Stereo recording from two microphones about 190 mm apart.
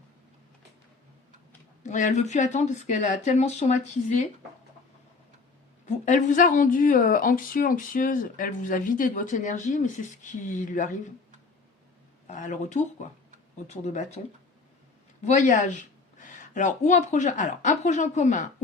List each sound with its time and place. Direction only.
1.8 s speech: 40° left (ahead or behind)
6.1 s speech: 40° left (ahead or behind)
12.3 s speech: 40° left (ahead or behind)
15.2 s a woman's voice: 40° left (ahead or behind)